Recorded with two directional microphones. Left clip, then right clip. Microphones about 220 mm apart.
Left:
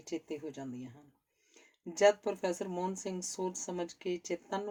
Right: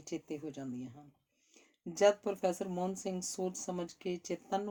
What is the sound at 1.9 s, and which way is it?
Speech, 40° right (ahead or behind).